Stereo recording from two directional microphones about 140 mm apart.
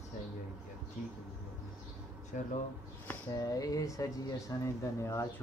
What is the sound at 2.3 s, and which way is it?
Speech, 65° left (ahead or behind).